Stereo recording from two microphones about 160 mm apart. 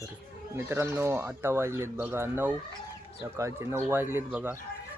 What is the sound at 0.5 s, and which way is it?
Speech, 15° right (ahead or behind).